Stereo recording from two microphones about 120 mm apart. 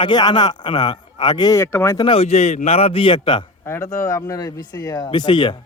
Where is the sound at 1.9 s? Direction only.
40° left (ahead or behind).